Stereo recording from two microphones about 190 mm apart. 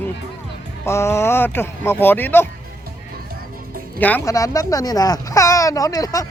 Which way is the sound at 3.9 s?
10° left (ahead or behind).